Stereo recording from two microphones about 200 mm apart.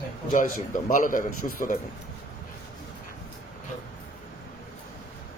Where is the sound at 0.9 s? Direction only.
40° left (ahead or behind).